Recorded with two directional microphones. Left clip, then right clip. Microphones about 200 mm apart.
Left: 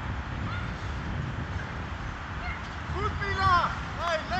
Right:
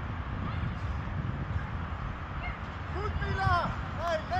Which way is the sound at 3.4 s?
65° right (ahead or behind).